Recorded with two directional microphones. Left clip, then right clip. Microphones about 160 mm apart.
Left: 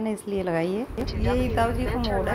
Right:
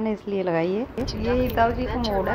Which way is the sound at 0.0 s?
15° left (ahead or behind).